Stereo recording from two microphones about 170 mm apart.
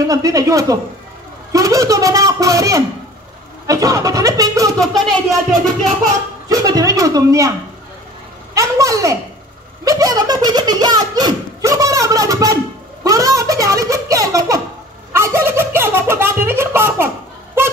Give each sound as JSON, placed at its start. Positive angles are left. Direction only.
{"t": 0.0, "sound": "speech", "side_deg": -20}
{"t": 4.7, "sound": "speech", "side_deg": 0}
{"t": 6.5, "sound": "speech", "side_deg": -20}
{"t": 8.5, "sound": "speech", "side_deg": -20}
{"t": 13.0, "sound": "a sound", "side_deg": -20}